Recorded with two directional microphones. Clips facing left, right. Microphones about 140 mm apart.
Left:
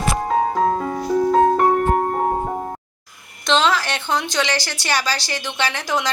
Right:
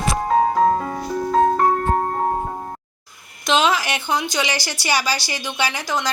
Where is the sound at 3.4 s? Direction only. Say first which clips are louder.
Even; 10° right (ahead or behind).